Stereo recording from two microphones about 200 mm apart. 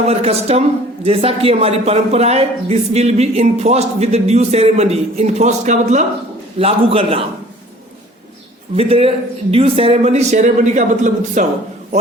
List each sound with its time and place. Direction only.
0.0 s a man's voice: 30° right (ahead or behind)
8.7 s speech: 30° right (ahead or behind)